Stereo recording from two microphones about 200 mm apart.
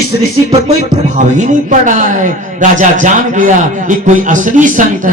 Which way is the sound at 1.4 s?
40° right (ahead or behind).